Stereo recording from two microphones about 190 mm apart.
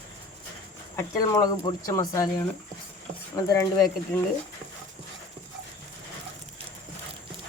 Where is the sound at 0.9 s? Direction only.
20° left (ahead or behind).